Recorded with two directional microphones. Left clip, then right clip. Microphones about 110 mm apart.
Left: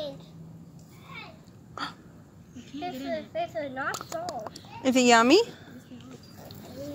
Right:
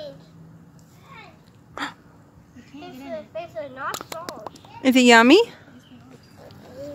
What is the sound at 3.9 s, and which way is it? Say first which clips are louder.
Speech: even; 90° right.